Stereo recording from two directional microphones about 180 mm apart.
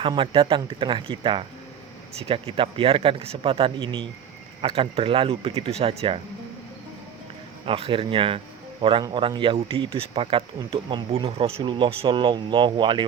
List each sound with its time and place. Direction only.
0.0 s speech: 30° right (ahead or behind)
7.6 s speech: 30° right (ahead or behind)